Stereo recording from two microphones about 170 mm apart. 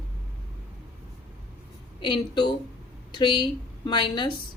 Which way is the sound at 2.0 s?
25° left (ahead or behind).